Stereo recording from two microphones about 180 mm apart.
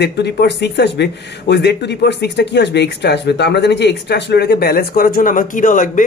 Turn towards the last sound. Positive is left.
turn(degrees=45)  # may be behind; listen again after turning